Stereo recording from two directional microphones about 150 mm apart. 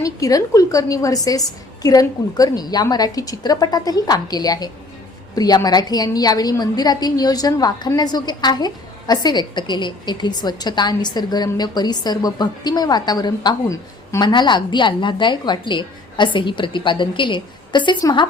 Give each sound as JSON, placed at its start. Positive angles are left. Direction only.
{"t": 0.0, "sound": "a woman's voice", "side_deg": 25}